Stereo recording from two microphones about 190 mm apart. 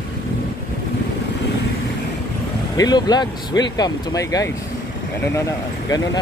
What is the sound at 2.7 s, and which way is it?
Speech, 20° left (ahead or behind).